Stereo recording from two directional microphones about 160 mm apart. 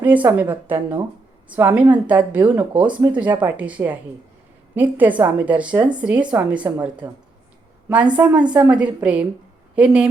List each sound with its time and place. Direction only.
0.0 s a woman's voice: 10° right (ahead or behind)
8.1 s a woman's voice: 5° right (ahead or behind)